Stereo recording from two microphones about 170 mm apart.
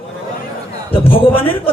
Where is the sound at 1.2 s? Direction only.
30° left (ahead or behind).